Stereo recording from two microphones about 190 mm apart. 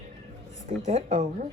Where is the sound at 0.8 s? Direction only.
35° right (ahead or behind).